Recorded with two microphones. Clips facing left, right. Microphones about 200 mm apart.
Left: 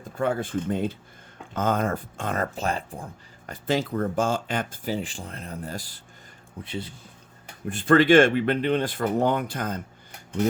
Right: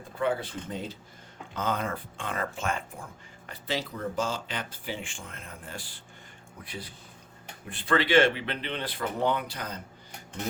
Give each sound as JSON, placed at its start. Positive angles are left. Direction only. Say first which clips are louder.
{"t": 0.2, "sound": "speech", "louder": "left 4 dB", "side_deg": 45}
{"t": 6.6, "sound": "speech", "louder": "left 7 dB", "side_deg": 25}
{"t": 7.7, "sound": "speech", "louder": "left 7 dB", "side_deg": 45}